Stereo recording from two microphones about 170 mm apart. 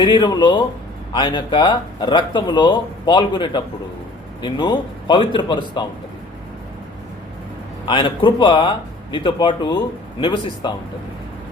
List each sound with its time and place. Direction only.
0.0 s speech: 25° left (ahead or behind)
7.9 s speech: 30° left (ahead or behind)